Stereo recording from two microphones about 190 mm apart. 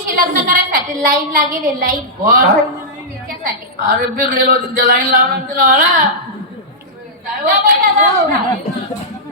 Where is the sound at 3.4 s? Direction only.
50° right (ahead or behind).